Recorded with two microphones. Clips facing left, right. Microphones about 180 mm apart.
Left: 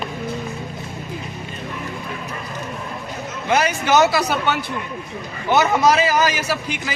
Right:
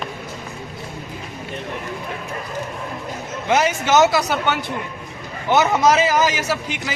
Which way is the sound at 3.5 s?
20° right (ahead or behind).